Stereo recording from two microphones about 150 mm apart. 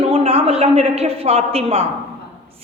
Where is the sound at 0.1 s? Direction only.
40° right (ahead or behind).